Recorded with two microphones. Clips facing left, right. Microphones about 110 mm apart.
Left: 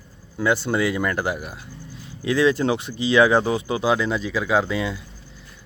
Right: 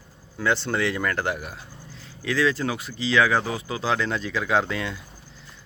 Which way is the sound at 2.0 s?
20° left (ahead or behind).